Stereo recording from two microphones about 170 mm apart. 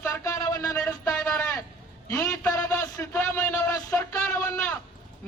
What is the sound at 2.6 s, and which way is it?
Music, 15° left (ahead or behind).